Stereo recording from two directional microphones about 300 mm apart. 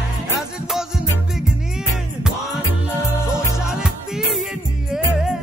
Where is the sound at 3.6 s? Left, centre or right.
Centre.